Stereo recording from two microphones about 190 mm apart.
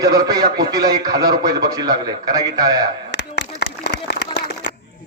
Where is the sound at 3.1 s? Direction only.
65° left (ahead or behind).